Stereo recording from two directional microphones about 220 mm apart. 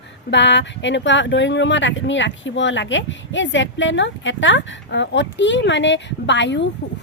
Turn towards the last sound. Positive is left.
turn(degrees=55)  # may be behind; listen again after turning